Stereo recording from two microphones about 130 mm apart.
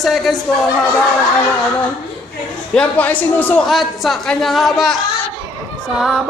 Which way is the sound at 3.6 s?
Centre (ahead or behind).